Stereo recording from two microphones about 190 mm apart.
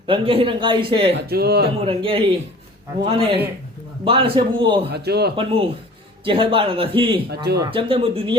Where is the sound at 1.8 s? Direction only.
30° right (ahead or behind).